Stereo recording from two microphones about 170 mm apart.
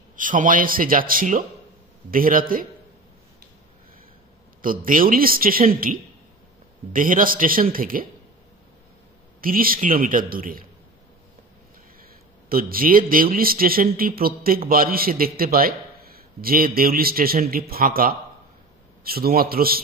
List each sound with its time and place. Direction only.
0.1 s a man's voice: 50° right (ahead or behind)
4.6 s speech: 55° right (ahead or behind)
9.4 s speech: 55° right (ahead or behind)
12.4 s speech: 60° right (ahead or behind)